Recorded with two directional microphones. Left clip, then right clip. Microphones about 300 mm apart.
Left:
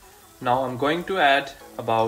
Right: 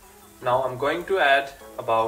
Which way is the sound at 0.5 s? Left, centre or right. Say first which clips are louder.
Even; left.